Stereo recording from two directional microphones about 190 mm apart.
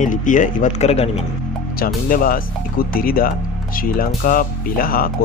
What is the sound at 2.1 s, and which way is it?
Speech, 50° left (ahead or behind).